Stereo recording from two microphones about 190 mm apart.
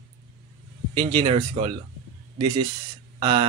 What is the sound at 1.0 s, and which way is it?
Speech, 25° right (ahead or behind).